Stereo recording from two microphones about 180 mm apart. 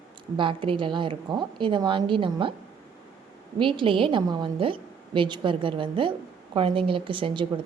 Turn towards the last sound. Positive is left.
turn(degrees=-30)  # may be behind; listen again after turning